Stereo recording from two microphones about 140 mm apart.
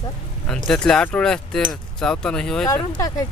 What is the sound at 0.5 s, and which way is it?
Speech, 5° left (ahead or behind).